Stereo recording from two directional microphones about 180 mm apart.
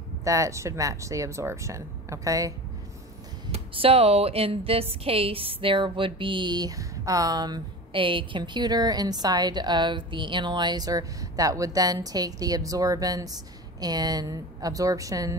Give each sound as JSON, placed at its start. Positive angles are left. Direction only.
{"t": 0.2, "sound": "speech", "side_deg": -15}
{"t": 3.5, "sound": "a woman's voice", "side_deg": -35}